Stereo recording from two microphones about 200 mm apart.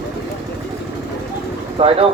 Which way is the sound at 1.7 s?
30° right (ahead or behind).